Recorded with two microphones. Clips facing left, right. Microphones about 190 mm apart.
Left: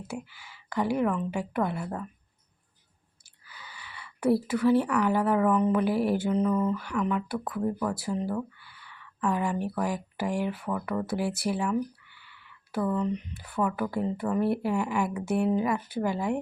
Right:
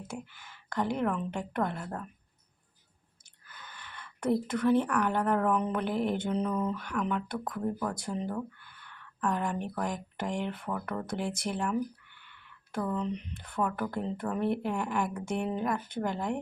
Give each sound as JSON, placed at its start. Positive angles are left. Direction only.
{"t": 0.1, "sound": "a woman's voice", "side_deg": 5}
{"t": 3.5, "sound": "a woman's voice", "side_deg": 5}